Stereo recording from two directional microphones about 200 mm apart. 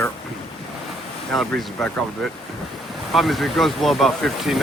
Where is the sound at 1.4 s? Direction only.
Centre (ahead or behind).